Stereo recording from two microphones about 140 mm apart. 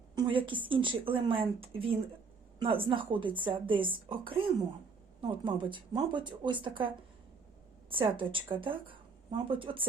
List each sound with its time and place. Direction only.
0.2 s a woman's voice: 35° right (ahead or behind)